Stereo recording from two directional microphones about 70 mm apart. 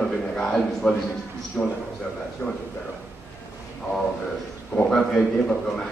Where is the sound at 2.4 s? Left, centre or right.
Centre.